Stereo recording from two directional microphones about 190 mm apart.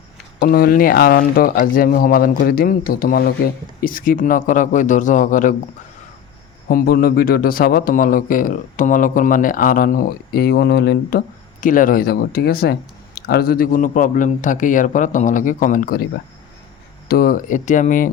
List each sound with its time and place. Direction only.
0.3 s speech: 50° left (ahead or behind)
6.7 s speech: 50° left (ahead or behind)
11.6 s speech: 45° left (ahead or behind)
17.1 s speech: 50° left (ahead or behind)